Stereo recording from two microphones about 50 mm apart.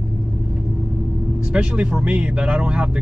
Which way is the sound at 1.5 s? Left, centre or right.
Right.